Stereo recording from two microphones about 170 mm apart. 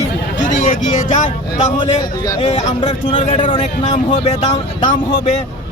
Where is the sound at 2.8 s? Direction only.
30° left (ahead or behind).